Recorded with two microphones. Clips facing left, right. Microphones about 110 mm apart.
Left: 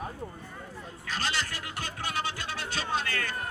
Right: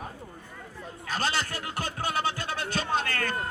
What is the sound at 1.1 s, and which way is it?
Music, 45° right (ahead or behind).